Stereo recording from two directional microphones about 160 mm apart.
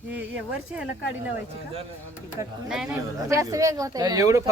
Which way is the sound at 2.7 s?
5° right (ahead or behind).